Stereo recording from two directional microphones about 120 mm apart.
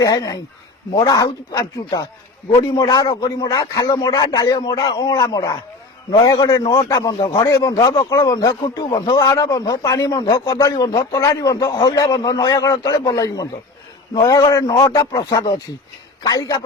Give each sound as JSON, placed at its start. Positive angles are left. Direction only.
{"t": 0.0, "sound": "a man's voice", "side_deg": 30}